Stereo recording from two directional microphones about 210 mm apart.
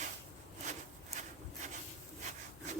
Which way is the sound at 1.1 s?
35° right (ahead or behind).